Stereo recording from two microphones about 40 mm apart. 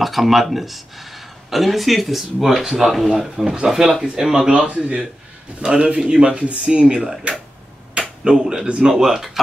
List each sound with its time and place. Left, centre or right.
0.0 s speech: centre
4.5 s speech: right; by 9.4 s centre